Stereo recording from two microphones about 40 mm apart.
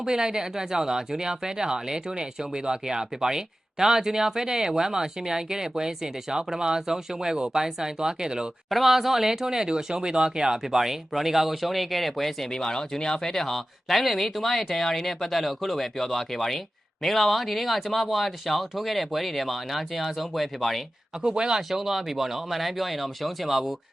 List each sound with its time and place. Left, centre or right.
0.0 s speech: centre
8.7 s speech: centre
12.5 s speech: centre
21.2 s speech: centre
21.7 s speech: centre